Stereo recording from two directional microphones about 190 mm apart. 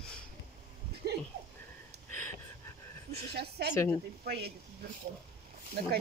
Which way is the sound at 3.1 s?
55° right (ahead or behind).